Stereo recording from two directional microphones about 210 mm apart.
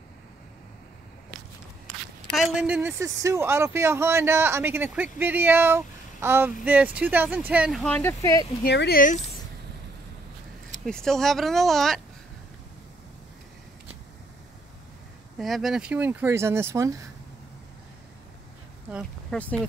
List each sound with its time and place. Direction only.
2.2 s a man's voice: centre (ahead or behind)
8.6 s speech: 50° left (ahead or behind)
10.9 s speech: 5° left (ahead or behind)
15.3 s a man's voice: centre (ahead or behind)
19.3 s speech: 5° left (ahead or behind)